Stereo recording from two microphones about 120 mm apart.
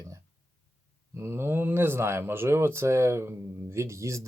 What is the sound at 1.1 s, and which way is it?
Speech, 20° right (ahead or behind).